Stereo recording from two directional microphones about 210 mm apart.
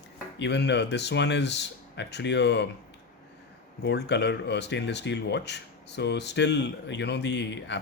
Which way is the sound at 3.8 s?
55° left (ahead or behind).